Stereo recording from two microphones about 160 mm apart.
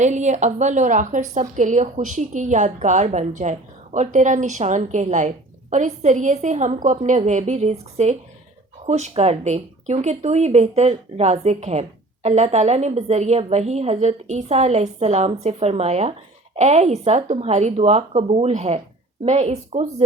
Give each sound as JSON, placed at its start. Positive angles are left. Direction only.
{"t": 0.0, "sound": "speech", "side_deg": -45}